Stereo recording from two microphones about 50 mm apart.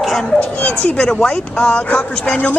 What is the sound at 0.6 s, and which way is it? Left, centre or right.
Speech, left.